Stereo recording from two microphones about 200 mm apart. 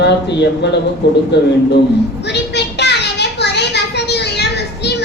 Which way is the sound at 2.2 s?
55° left (ahead or behind).